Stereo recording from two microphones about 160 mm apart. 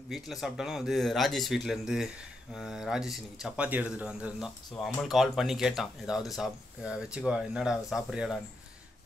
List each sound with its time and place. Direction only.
0.1 s speech: centre (ahead or behind)